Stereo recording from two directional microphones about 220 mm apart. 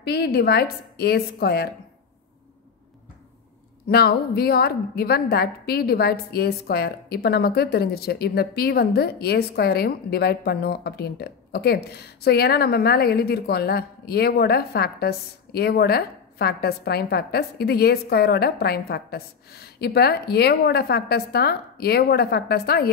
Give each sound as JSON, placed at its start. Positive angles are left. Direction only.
{"t": 0.0, "sound": "a woman's voice", "side_deg": 50}
{"t": 3.8, "sound": "a woman's voice", "side_deg": 45}